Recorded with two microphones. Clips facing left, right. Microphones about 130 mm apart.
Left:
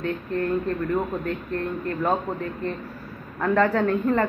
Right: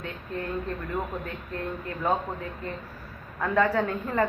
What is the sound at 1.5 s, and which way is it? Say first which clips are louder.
Speech: left 5 dB; 15° right (ahead or behind).